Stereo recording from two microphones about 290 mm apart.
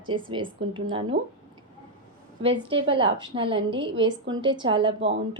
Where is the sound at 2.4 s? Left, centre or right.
Centre.